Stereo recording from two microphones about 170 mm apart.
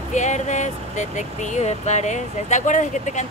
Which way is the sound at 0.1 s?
45° left (ahead or behind).